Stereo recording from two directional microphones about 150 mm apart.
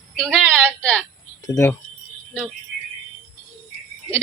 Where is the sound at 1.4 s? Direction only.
20° left (ahead or behind).